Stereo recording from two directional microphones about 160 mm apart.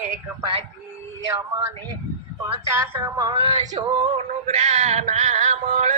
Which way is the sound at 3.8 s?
30° right (ahead or behind).